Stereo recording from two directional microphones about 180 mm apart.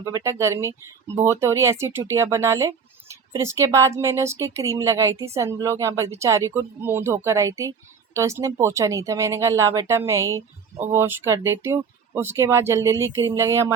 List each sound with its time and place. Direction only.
0.0 s speech: 15° right (ahead or behind)